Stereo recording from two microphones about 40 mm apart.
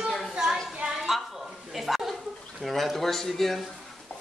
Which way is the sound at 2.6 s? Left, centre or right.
Centre.